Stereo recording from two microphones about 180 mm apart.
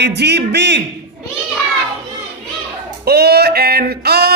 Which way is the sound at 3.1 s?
65° right (ahead or behind).